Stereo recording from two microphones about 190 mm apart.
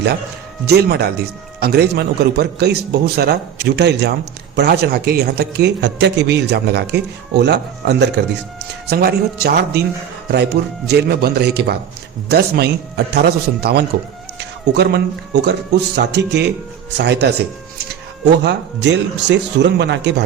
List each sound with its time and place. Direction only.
0.7 s a man's voice: 55° right (ahead or behind)